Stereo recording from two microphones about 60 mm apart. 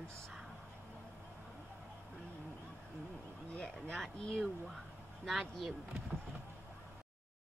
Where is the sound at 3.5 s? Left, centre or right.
Centre.